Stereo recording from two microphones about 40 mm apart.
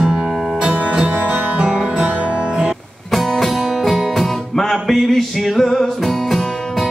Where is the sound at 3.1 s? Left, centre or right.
Centre.